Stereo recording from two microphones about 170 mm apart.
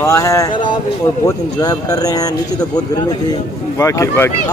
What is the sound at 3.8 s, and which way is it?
Speech, 20° left (ahead or behind).